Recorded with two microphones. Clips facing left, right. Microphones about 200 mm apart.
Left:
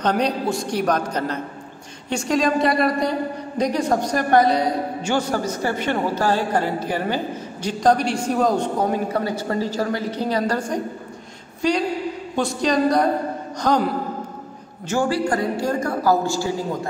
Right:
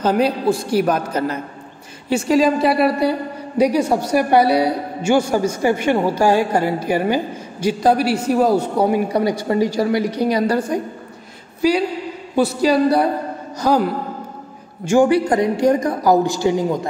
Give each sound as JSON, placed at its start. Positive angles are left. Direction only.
{"t": 0.0, "sound": "a man's voice", "side_deg": -5}
{"t": 14.9, "sound": "a woman's voice", "side_deg": -20}